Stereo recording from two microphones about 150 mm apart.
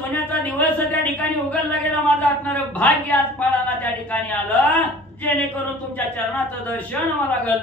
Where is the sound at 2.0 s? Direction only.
10° left (ahead or behind).